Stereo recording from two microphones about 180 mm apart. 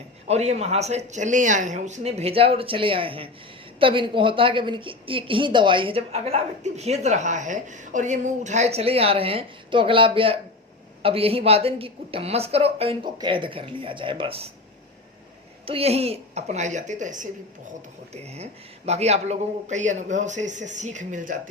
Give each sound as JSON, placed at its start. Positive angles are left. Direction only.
{"t": 0.3, "sound": "a woman's voice", "side_deg": -35}
{"t": 15.6, "sound": "a woman's voice", "side_deg": -35}